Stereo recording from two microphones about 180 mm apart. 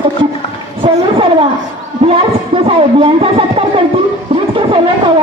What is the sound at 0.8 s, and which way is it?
Vehicle, 30° right (ahead or behind).